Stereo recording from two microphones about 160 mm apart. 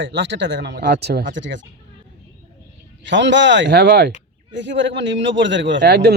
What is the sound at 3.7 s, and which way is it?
Speech, 90° right.